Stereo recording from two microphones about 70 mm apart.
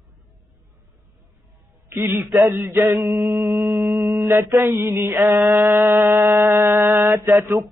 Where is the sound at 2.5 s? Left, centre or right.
Right.